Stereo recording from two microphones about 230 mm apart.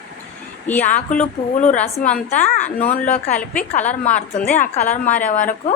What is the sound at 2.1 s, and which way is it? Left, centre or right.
A woman's voice, left.